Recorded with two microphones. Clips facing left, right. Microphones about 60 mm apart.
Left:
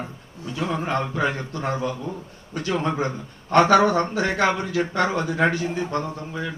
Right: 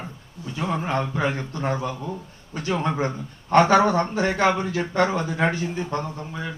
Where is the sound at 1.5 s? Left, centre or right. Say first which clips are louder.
Even; right.